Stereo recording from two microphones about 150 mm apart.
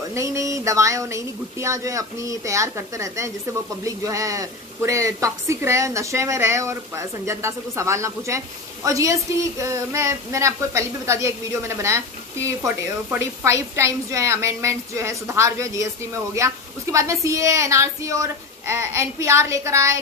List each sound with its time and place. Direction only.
0.1 s a woman's voice: 20° right (ahead or behind)